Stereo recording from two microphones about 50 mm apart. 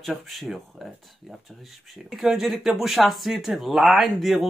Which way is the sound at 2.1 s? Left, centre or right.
Centre.